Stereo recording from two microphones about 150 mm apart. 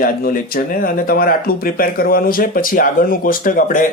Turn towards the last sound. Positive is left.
turn(degrees=65)  # may be behind; listen again after turning